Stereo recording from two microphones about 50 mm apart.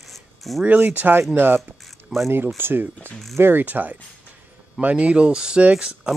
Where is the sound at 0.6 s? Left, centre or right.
Right.